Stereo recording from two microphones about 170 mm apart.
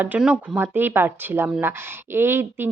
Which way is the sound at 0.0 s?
10° right (ahead or behind).